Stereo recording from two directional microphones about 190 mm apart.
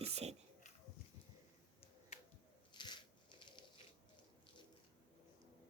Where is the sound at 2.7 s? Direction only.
25° left (ahead or behind).